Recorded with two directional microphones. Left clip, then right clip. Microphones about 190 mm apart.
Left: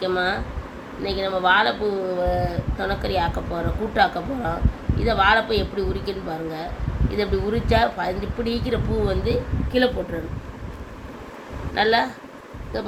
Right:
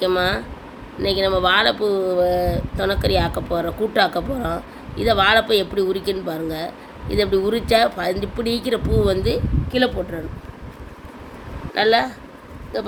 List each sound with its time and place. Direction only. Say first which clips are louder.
0.0 s speech: right 3 dB; 65° right (ahead or behind)
11.7 s speech: right 2 dB; 65° right (ahead or behind)